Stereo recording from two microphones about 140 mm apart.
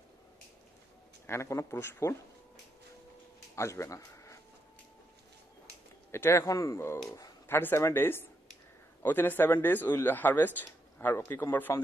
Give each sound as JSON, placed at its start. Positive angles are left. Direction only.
{"t": 1.2, "sound": "speech", "side_deg": 20}
{"t": 3.5, "sound": "speech", "side_deg": 20}
{"t": 6.1, "sound": "speech", "side_deg": 20}